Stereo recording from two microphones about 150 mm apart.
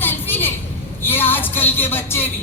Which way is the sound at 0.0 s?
15° left (ahead or behind).